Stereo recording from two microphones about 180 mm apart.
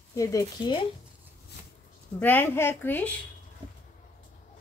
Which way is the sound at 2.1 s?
10° left (ahead or behind).